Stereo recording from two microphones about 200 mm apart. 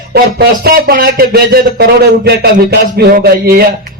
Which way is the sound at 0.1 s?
50° right (ahead or behind).